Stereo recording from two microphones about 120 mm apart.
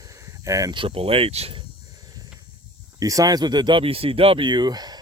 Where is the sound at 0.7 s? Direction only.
50° right (ahead or behind).